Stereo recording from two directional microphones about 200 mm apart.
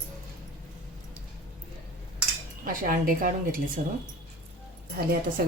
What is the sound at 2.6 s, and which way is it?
A woman's voice, 45° right (ahead or behind).